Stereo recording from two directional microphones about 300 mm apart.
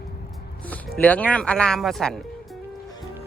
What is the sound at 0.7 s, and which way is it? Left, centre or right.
Speech, centre.